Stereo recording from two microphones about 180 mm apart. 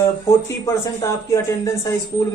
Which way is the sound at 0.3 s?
15° left (ahead or behind).